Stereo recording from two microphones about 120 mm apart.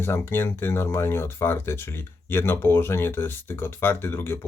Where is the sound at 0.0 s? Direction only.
20° left (ahead or behind).